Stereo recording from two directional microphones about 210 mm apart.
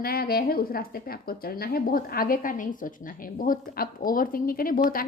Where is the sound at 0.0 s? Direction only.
45° left (ahead or behind).